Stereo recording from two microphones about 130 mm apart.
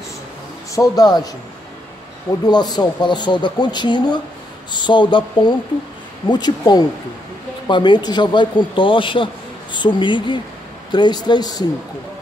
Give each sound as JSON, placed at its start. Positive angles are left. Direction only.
{"t": 0.7, "sound": "a man's voice", "side_deg": 30}
{"t": 2.4, "sound": "a man's voice", "side_deg": 30}